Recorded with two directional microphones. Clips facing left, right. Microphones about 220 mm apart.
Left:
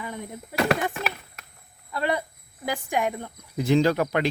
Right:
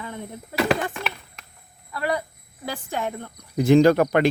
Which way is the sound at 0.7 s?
5° left (ahead or behind).